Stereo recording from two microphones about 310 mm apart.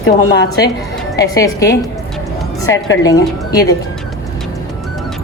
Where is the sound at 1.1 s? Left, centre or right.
Centre.